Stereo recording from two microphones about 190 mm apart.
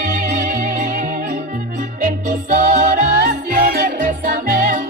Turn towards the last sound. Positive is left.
turn(degrees=-45)  # may be behind; listen again after turning